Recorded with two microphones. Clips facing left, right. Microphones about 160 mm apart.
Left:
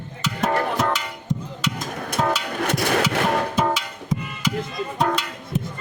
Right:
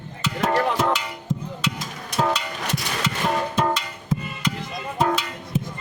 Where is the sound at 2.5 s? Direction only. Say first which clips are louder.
Left 7 dB; 55° left (ahead or behind).